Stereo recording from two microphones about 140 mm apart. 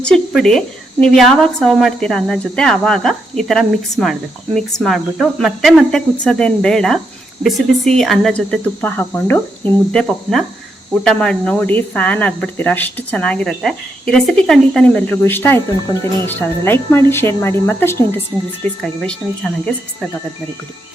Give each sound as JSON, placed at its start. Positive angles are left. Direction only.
{"t": 0.0, "sound": "a woman's voice", "side_deg": 5}
{"t": 19.0, "sound": "a woman's voice", "side_deg": 5}